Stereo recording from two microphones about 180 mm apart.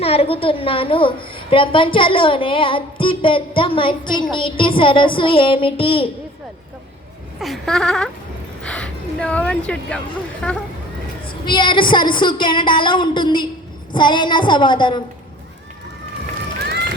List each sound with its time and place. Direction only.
0.0 s a woman's voice: 35° left (ahead or behind)
7.3 s speech: centre (ahead or behind)
11.3 s a woman's voice: 25° left (ahead or behind)